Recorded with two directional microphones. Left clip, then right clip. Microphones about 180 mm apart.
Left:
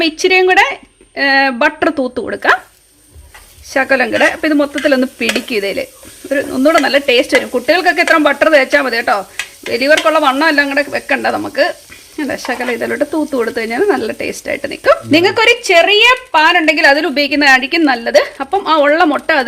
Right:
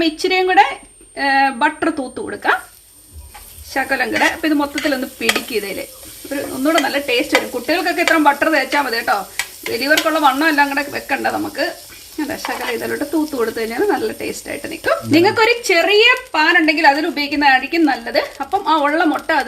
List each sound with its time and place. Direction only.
0.0 s speech: 50° left (ahead or behind)
3.7 s speech: 50° left (ahead or behind)